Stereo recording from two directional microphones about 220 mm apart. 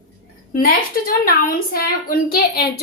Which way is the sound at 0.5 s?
40° left (ahead or behind).